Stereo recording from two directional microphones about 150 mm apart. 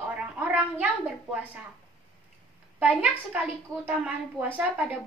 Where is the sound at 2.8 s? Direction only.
10° right (ahead or behind).